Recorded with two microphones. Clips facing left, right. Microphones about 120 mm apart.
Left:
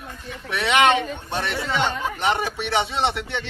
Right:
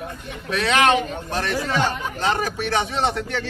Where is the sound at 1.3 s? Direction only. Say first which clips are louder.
Right 2 dB; 20° left (ahead or behind).